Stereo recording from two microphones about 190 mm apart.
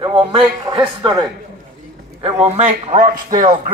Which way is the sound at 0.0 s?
25° right (ahead or behind).